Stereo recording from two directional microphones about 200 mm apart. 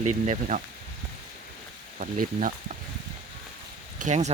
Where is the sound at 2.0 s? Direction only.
40° right (ahead or behind).